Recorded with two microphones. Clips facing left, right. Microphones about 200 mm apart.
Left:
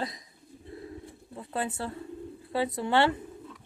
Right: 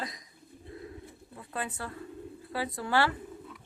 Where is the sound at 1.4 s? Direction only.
30° left (ahead or behind).